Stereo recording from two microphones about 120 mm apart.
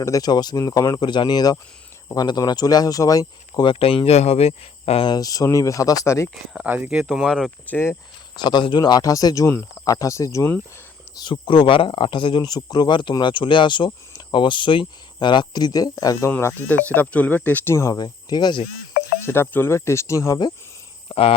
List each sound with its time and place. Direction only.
0.0 s speech: 30° left (ahead or behind)
3.7 s speech: 50° left (ahead or behind)
5.1 s speech: 30° left (ahead or behind)
6.3 s speech: 5° right (ahead or behind)
6.7 s speech: 15° right (ahead or behind)
7.1 s speech: centre (ahead or behind)
7.7 s speech: 20° left (ahead or behind)
8.4 s speech: 40° left (ahead or behind)
11.2 s speech: 45° left (ahead or behind)
16.3 s speech: 20° left (ahead or behind)
17.9 s speech: 35° left (ahead or behind)
19.2 s speech: 20° left (ahead or behind)
21.1 s speech: 55° left (ahead or behind)